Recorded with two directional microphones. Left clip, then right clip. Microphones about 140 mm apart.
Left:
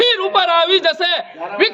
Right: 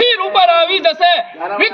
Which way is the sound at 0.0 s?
30° left (ahead or behind).